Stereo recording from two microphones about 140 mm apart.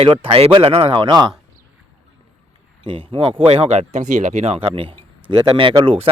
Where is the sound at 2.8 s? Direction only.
40° right (ahead or behind).